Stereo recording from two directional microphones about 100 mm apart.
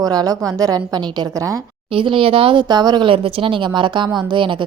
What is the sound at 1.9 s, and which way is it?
Speech, 60° right (ahead or behind).